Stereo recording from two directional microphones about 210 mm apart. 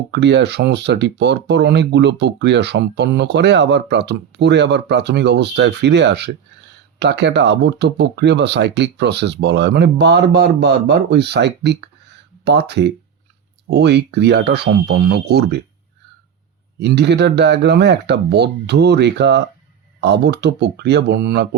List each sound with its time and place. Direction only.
0.1 s speech: 55° right (ahead or behind)
16.8 s speech: 55° right (ahead or behind)